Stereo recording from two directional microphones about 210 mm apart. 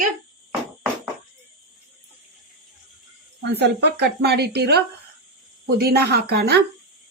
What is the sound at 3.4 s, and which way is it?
Speech, 55° right (ahead or behind).